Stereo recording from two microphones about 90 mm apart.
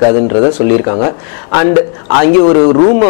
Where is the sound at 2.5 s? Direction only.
20° left (ahead or behind).